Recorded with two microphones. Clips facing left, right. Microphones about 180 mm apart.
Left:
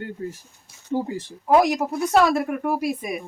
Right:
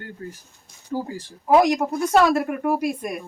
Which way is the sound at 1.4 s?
Centre (ahead or behind).